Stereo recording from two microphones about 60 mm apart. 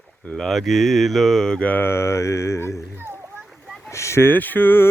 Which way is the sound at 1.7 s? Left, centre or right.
Left.